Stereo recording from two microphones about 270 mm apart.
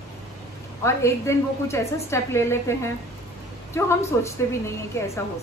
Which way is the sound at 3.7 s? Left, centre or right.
Centre.